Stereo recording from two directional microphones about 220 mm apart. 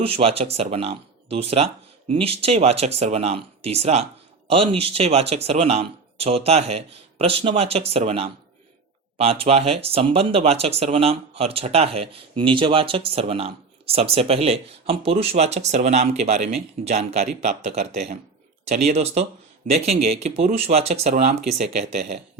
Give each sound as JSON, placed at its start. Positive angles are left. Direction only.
{"t": 0.0, "sound": "speech", "side_deg": -25}